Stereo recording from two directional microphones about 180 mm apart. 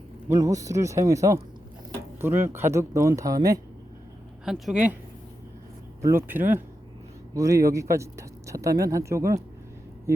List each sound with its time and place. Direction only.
0.3 s speech: 20° right (ahead or behind)
4.4 s speech: centre (ahead or behind)
6.0 s speech: 15° right (ahead or behind)